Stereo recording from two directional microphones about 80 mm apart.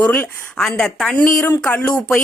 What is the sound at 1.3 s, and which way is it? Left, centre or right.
Speech, left.